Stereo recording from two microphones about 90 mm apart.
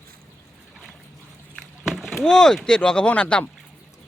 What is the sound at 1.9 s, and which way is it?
Rowboat, centre (ahead or behind).